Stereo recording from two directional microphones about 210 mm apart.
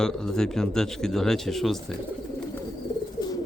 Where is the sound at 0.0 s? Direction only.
5° left (ahead or behind).